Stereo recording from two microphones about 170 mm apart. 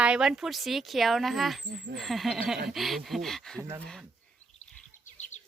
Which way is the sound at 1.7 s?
90° right.